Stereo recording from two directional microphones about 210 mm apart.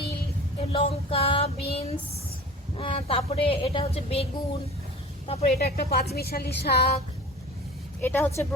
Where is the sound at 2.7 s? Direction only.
25° left (ahead or behind).